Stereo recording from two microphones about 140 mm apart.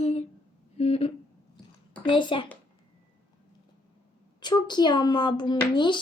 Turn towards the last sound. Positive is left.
turn(degrees=35)  # may be behind; listen again after turning